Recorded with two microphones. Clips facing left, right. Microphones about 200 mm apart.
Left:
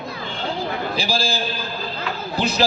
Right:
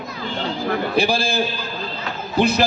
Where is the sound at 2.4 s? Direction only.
55° right (ahead or behind).